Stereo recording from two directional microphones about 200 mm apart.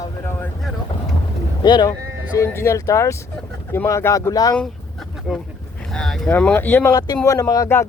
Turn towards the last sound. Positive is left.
turn(degrees=15)  # may be behind; listen again after turning